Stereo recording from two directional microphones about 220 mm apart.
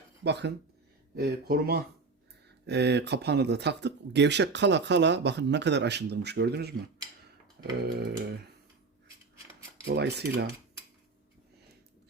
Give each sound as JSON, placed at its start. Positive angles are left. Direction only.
{"t": 0.3, "sound": "speech", "side_deg": -50}
{"t": 7.8, "sound": "speech", "side_deg": -45}
{"t": 9.8, "sound": "speech", "side_deg": -50}